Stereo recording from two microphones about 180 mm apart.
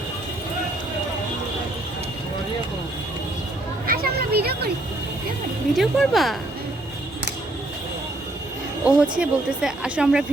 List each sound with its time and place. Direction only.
3.8 s a sound: 55° right (ahead or behind)
5.7 s a woman's voice: centre (ahead or behind)
8.8 s a woman's voice: 5° right (ahead or behind)